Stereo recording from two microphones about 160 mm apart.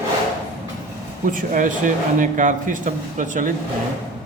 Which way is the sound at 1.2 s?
55° right (ahead or behind).